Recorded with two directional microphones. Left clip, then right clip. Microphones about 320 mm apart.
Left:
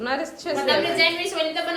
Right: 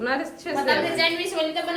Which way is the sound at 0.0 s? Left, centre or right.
Centre.